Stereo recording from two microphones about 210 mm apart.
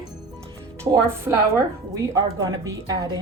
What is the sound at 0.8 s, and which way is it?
A woman's voice, 10° right (ahead or behind).